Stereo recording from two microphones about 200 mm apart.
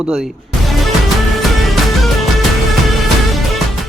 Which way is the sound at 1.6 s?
Centre (ahead or behind).